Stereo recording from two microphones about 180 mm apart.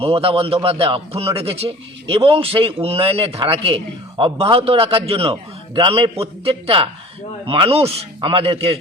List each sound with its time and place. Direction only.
0.0 s a man's voice: 30° right (ahead or behind)